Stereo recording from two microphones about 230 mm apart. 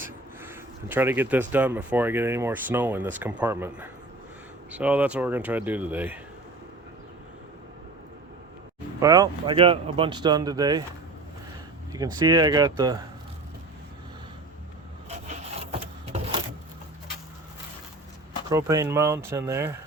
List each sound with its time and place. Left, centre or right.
0.0 s speech: centre
9.0 s speech: centre
11.9 s speech: centre
16.1 s a sound: right
18.5 s speech: centre